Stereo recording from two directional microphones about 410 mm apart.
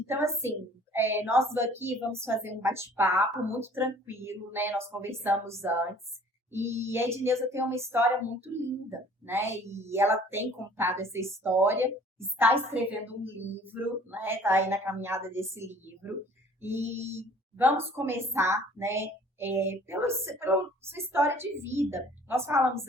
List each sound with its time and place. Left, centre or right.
0.0 s a woman's voice: centre